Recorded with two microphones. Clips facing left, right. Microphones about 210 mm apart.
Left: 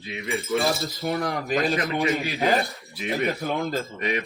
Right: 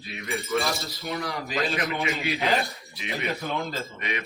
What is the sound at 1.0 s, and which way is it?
Speech, 50° left (ahead or behind).